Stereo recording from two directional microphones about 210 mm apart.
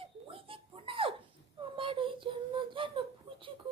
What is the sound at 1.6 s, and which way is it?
Child singing, 25° right (ahead or behind).